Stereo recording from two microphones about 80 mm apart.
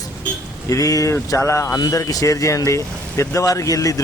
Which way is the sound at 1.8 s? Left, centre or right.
Left.